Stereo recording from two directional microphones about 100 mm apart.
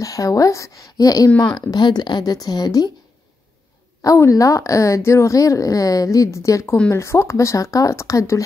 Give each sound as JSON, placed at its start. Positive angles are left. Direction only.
{"t": 0.0, "sound": "a woman's voice", "side_deg": 35}
{"t": 4.0, "sound": "a woman's voice", "side_deg": 35}